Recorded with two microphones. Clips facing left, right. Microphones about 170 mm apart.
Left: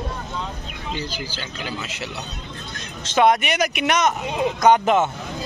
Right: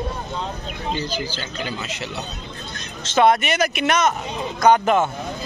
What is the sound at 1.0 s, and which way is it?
Speech, 10° left (ahead or behind).